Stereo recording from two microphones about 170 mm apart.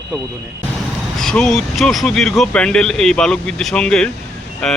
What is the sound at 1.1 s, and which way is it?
Speech, 5° left (ahead or behind).